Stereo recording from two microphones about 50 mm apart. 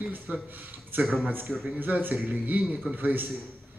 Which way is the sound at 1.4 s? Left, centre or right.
Centre.